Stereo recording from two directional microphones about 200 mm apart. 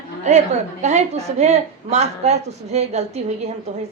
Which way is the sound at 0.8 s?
35° right (ahead or behind).